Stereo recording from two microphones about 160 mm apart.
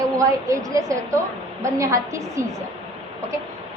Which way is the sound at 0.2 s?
20° right (ahead or behind).